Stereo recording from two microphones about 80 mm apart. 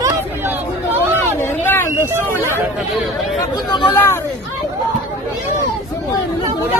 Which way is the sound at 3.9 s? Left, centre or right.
Left.